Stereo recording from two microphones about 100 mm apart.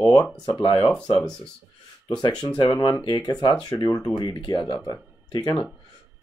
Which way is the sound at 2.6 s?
45° left (ahead or behind).